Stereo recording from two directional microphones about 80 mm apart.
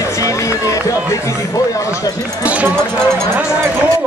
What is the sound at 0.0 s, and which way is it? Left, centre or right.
Music, left.